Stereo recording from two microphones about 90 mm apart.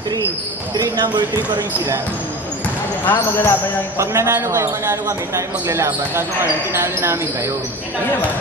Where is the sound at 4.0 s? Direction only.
30° right (ahead or behind).